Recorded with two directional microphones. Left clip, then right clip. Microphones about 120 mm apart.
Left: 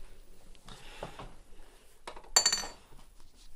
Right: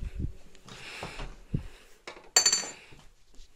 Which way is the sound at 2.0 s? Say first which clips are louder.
Right 3 dB; centre (ahead or behind).